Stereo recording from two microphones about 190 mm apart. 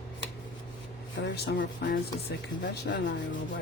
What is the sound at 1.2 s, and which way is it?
Speech, 65° left (ahead or behind).